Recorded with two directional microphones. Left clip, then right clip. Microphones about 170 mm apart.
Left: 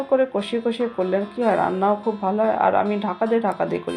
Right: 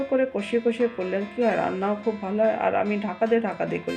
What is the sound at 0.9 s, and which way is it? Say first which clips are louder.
Speech: left 5 dB; 15° right (ahead or behind).